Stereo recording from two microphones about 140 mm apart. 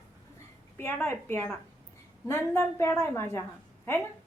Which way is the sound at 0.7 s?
15° left (ahead or behind).